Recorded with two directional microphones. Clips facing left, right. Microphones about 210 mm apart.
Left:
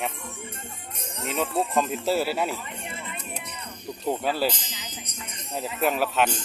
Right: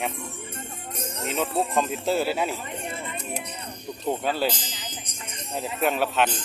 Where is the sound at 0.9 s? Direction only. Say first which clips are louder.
Right 2 dB; 40° right (ahead or behind).